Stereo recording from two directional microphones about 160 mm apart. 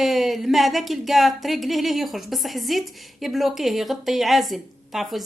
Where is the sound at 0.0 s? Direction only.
Centre (ahead or behind).